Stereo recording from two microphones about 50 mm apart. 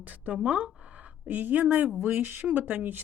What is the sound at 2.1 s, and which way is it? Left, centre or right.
Speech, right.